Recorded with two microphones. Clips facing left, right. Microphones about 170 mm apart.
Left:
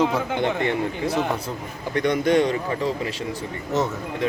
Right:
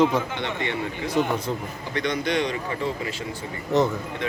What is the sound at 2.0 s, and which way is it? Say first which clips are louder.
Speech: left 6 dB; 50° left (ahead or behind).